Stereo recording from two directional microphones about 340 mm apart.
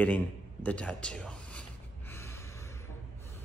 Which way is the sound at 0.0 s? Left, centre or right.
Centre.